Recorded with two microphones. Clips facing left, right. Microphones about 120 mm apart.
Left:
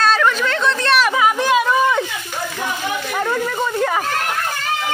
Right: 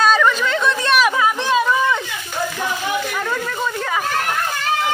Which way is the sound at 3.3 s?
30° left (ahead or behind).